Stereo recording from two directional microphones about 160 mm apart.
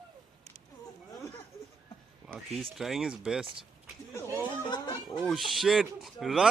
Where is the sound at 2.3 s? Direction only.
Centre (ahead or behind).